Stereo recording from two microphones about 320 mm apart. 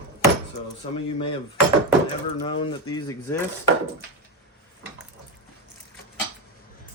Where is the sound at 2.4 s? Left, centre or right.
Centre.